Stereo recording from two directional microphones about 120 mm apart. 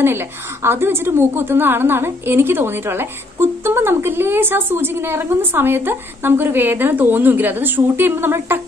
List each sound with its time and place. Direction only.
0.0 s a woman's voice: 20° right (ahead or behind)